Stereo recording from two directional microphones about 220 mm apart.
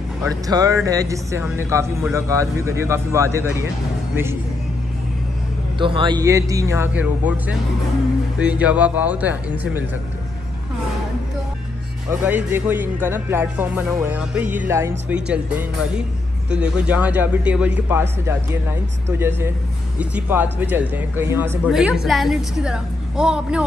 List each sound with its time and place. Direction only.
0.5 s speech: 15° right (ahead or behind)
5.8 s speech: 20° right (ahead or behind)
12.1 s speech: 10° right (ahead or behind)
19.0 s a woman's voice: 10° right (ahead or behind)